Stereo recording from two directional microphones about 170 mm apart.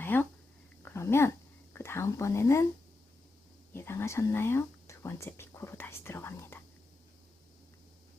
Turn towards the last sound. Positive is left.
turn(degrees=15)  # may be behind; listen again after turning